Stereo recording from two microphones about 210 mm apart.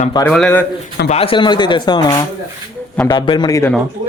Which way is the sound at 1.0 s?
30° left (ahead or behind).